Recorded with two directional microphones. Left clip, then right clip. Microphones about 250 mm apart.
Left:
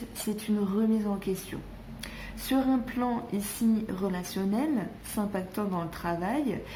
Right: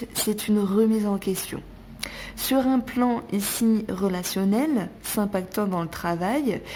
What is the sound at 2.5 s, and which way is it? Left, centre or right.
A woman's voice, right.